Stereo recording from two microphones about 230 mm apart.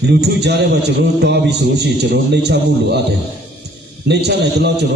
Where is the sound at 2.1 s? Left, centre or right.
Right.